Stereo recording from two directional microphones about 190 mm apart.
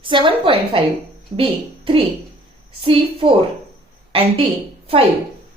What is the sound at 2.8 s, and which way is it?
Speech, 30° right (ahead or behind).